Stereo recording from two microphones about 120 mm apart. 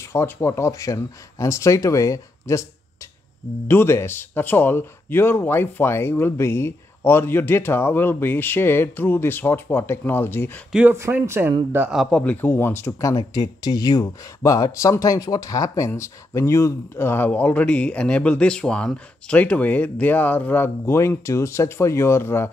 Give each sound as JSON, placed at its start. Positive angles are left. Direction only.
{"t": 0.1, "sound": "speech", "side_deg": 20}
{"t": 3.6, "sound": "speech", "side_deg": 20}
{"t": 10.7, "sound": "speech", "side_deg": -10}
{"t": 11.9, "sound": "speech", "side_deg": 0}